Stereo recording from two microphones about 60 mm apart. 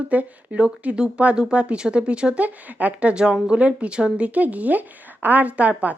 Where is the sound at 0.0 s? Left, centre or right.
Right.